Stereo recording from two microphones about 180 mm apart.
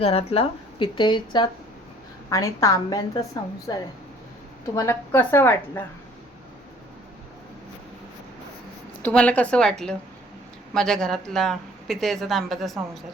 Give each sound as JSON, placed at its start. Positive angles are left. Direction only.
{"t": 0.0, "sound": "a woman's voice", "side_deg": 35}
{"t": 4.7, "sound": "a woman's voice", "side_deg": 15}
{"t": 9.0, "sound": "speech", "side_deg": 10}